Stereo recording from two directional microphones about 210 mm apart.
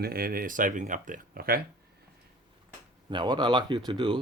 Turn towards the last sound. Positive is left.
turn(degrees=-25)  # may be behind; listen again after turning